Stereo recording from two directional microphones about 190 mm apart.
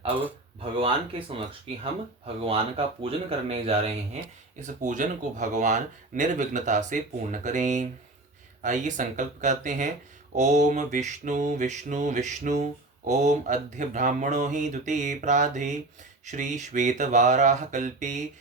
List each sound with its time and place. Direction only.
0.6 s speech: 30° right (ahead or behind)